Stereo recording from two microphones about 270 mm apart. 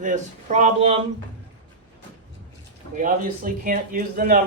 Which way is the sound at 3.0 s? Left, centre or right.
Right.